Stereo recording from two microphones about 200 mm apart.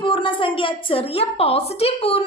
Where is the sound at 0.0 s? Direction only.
25° left (ahead or behind).